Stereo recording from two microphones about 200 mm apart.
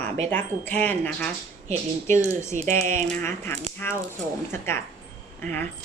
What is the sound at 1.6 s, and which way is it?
Speech, 35° right (ahead or behind).